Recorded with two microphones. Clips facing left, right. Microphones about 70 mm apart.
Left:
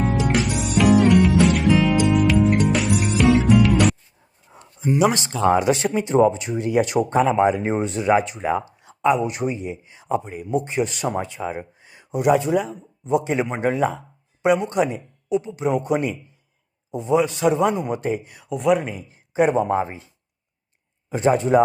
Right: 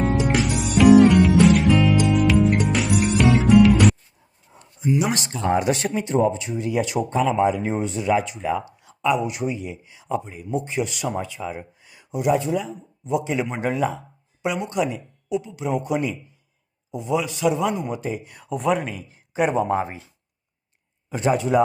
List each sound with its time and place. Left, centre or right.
0.0 s music: centre
5.4 s a man's voice: left
8.4 s speech: left
10.0 s speech: left
11.8 s a sound: left
12.3 s speech: left
13.1 s speech: left
13.5 s speech: left
14.7 s a man's voice: left
18.3 s speech: centre
18.9 s a man's voice: left
21.1 s a man's voice: left